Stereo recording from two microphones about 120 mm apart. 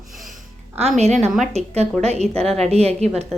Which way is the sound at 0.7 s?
60° right (ahead or behind).